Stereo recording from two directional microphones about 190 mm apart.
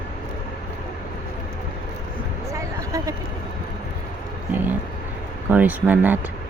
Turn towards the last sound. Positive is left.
turn(degrees=-10)  # may be behind; listen again after turning